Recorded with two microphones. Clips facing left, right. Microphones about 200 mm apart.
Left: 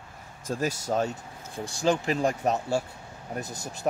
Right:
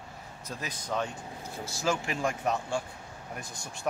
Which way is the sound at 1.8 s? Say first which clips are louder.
Left 6 dB; 35° left (ahead or behind).